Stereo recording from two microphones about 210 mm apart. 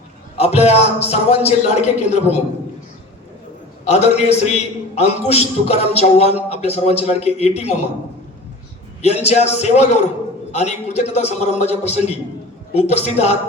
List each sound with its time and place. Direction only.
0.3 s a man's voice: 30° left (ahead or behind)
3.8 s a man's voice: 30° left (ahead or behind)
9.0 s a man's voice: 30° left (ahead or behind)